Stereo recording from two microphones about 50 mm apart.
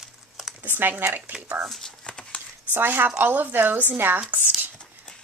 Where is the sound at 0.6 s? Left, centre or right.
Right.